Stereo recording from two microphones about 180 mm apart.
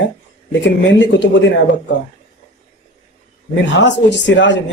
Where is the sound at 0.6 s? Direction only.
90° left.